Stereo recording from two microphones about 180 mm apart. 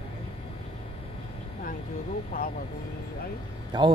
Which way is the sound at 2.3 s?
50° left (ahead or behind).